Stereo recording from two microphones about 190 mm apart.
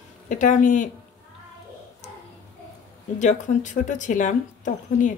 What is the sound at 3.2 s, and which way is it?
Speech, 40° left (ahead or behind).